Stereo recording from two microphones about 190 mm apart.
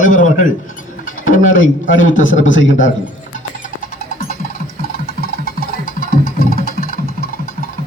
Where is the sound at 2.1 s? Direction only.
85° left.